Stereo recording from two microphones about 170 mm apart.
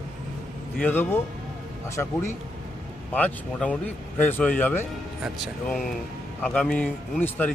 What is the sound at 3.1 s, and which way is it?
A man's voice, 10° left (ahead or behind).